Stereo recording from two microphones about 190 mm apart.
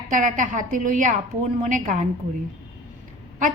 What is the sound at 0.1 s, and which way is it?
A woman's voice, 40° right (ahead or behind).